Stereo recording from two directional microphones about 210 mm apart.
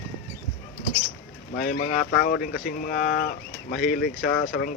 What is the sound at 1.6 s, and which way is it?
Speech, 45° left (ahead or behind).